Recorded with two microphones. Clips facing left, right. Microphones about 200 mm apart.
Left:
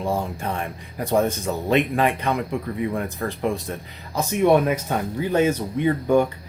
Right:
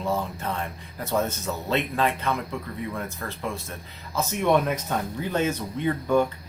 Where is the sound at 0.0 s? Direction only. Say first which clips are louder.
Left 3 dB; 15° left (ahead or behind).